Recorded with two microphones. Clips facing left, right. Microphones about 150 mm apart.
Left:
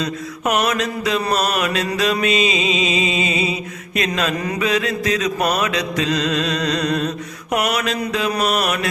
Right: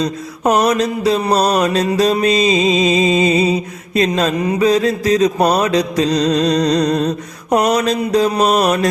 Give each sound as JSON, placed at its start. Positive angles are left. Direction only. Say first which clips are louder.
{"t": 0.0, "sound": "mantra", "louder": "right 5 dB", "side_deg": -35}